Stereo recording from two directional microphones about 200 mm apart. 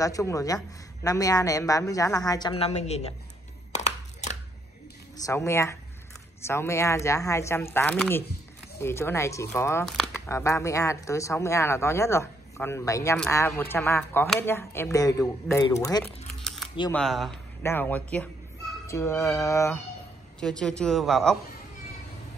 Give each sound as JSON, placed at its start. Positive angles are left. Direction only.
{"t": 0.0, "sound": "speech", "side_deg": 15}
{"t": 3.7, "sound": "a sound", "side_deg": 35}
{"t": 5.1, "sound": "speech", "side_deg": 15}
{"t": 16.9, "sound": "speech", "side_deg": 0}
{"t": 20.3, "sound": "speech", "side_deg": 5}